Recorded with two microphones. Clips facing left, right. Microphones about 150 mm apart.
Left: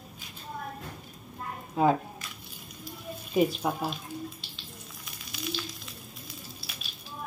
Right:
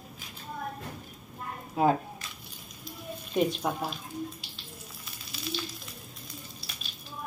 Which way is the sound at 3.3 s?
5° left (ahead or behind).